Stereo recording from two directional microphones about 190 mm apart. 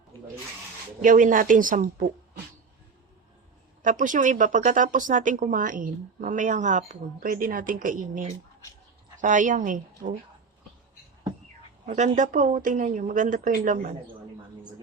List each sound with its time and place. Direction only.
1.0 s a woman's voice: 45° right (ahead or behind)
3.8 s a woman's voice: 45° right (ahead or behind)
11.9 s a woman's voice: 40° right (ahead or behind)